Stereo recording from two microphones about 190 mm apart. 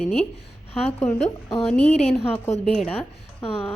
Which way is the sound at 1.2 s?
30° left (ahead or behind).